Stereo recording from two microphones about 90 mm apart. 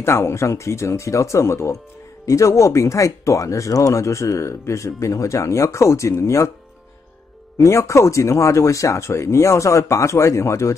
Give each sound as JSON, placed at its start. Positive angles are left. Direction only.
{"t": 0.0, "sound": "speech", "side_deg": 30}
{"t": 7.5, "sound": "speech", "side_deg": 35}